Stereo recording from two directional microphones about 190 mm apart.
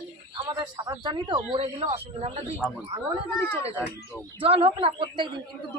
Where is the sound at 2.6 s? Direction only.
Centre (ahead or behind).